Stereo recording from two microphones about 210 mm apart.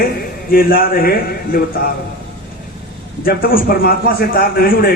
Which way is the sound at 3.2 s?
45° left (ahead or behind).